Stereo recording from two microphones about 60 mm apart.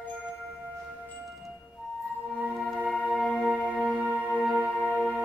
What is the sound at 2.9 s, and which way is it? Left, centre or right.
Music, left.